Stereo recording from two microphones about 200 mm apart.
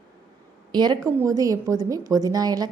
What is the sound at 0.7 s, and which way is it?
A woman's voice, 20° right (ahead or behind).